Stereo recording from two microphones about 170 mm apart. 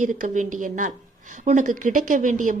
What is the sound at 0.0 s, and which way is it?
A woman's voice, 50° right (ahead or behind).